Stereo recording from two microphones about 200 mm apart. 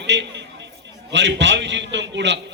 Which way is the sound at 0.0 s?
60° right (ahead or behind).